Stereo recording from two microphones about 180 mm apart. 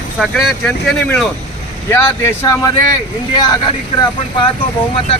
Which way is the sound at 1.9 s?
15° left (ahead or behind).